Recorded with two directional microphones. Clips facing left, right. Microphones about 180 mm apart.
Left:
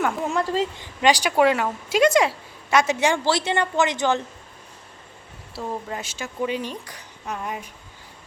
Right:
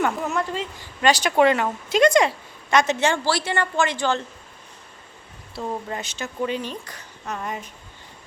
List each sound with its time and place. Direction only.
0.2 s speech: 30° left (ahead or behind)
1.0 s a woman's voice: 10° left (ahead or behind)
5.5 s a woman's voice: 5° left (ahead or behind)